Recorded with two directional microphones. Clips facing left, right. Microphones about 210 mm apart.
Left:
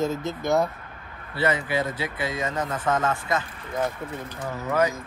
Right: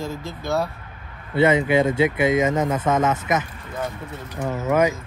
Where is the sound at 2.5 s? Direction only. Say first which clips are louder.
Right 7 dB; 90° right.